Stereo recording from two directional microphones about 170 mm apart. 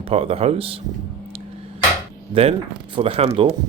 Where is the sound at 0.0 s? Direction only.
35° right (ahead or behind).